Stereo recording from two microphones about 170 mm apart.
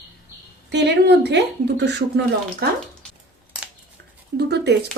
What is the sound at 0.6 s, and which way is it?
Speech, 80° right.